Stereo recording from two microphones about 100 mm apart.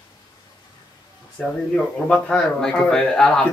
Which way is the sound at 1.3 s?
10° left (ahead or behind).